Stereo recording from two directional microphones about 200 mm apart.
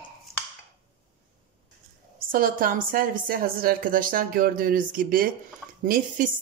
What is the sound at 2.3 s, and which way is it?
A woman's voice, 45° right (ahead or behind).